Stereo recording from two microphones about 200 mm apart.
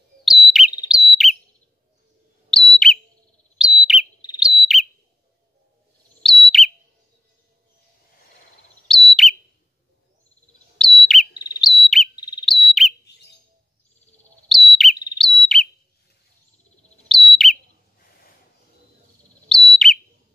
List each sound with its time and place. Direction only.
0.2 s bird: centre (ahead or behind)
2.5 s whistle: centre (ahead or behind)
3.5 s bird: 5° right (ahead or behind)
6.2 s bird: centre (ahead or behind)
8.8 s bird: centre (ahead or behind)
10.8 s bird: centre (ahead or behind)
12.2 s bird: 20° left (ahead or behind)
12.4 s whistle: centre (ahead or behind)
14.5 s bird: centre (ahead or behind)
15.1 s whistle: centre (ahead or behind)
17.1 s bird: centre (ahead or behind)
19.5 s bird: centre (ahead or behind)